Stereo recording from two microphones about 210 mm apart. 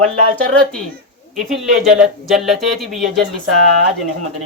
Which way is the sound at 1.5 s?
Centre (ahead or behind).